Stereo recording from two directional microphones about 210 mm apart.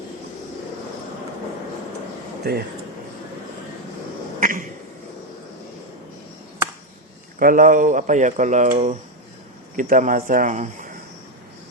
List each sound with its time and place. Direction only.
2.5 s speech: 45° right (ahead or behind)
4.4 s a sound: 40° right (ahead or behind)
7.3 s speech: 40° right (ahead or behind)